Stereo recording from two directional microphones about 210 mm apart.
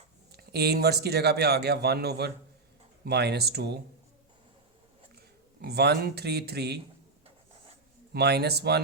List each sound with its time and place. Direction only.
0.3 s speech: 50° right (ahead or behind)
5.6 s speech: 50° right (ahead or behind)
8.1 s speech: 50° right (ahead or behind)